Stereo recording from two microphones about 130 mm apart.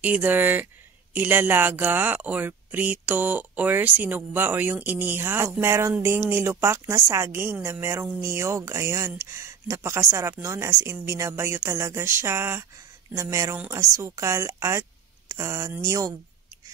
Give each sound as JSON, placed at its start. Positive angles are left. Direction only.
{"t": 0.0, "sound": "speech", "side_deg": -10}